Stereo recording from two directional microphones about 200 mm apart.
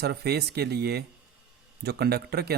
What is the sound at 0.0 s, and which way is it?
Speech, 55° right (ahead or behind).